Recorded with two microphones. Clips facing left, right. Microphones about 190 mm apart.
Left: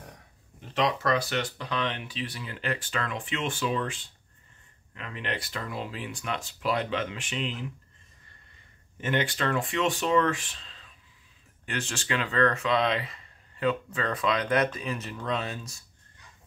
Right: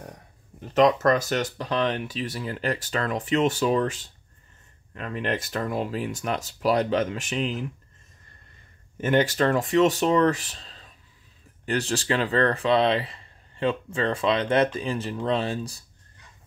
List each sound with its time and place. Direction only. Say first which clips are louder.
0.7 s speech: right 7 dB; 45° right (ahead or behind)
9.0 s speech: right 7 dB; 40° right (ahead or behind)